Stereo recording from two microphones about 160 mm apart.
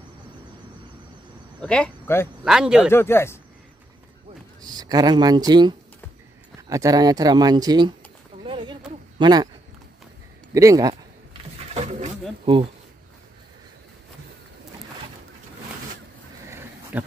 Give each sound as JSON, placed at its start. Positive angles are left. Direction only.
{"t": 1.6, "sound": "speech", "side_deg": 10}
{"t": 2.4, "sound": "speech", "side_deg": -5}
{"t": 2.9, "sound": "speech", "side_deg": 15}
{"t": 4.6, "sound": "speech", "side_deg": -25}
{"t": 8.5, "sound": "a sound", "side_deg": -30}
{"t": 9.2, "sound": "speech", "side_deg": -25}
{"t": 10.5, "sound": "speech", "side_deg": -20}
{"t": 11.7, "sound": "a sound", "side_deg": -45}
{"t": 16.4, "sound": "a sound", "side_deg": -15}